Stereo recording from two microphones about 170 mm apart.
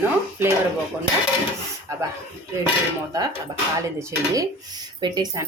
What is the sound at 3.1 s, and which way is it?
Speech, 20° right (ahead or behind).